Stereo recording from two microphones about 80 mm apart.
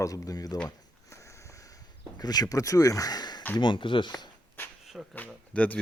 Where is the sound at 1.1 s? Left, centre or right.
Left.